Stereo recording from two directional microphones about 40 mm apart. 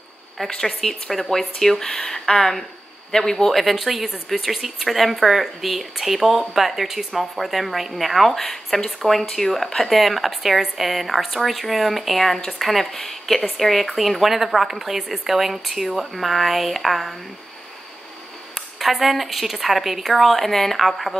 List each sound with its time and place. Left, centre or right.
0.4 s speech: centre
3.7 s speech: centre
18.5 s speech: centre